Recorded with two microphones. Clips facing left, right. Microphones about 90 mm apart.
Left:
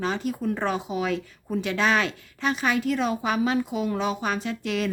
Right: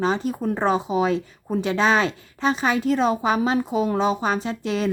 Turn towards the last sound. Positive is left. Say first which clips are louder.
# right 3 dB
turn(degrees=-30)  # may be behind; listen again after turning